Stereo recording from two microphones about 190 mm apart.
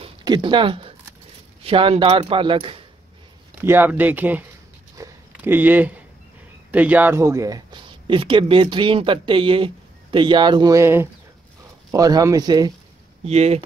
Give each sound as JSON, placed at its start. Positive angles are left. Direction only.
{"t": 0.0, "sound": "speech", "side_deg": -25}
{"t": 3.6, "sound": "speech", "side_deg": -10}
{"t": 4.9, "sound": "walk", "side_deg": -15}
{"t": 6.7, "sound": "speech", "side_deg": -10}
{"t": 13.2, "sound": "speech", "side_deg": -35}